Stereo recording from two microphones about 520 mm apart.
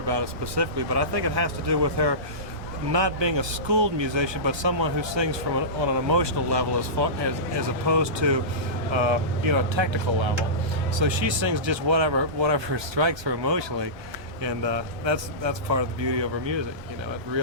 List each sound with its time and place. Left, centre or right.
0.1 s speech: right